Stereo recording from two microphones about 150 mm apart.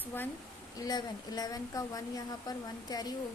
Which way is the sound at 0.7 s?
25° left (ahead or behind).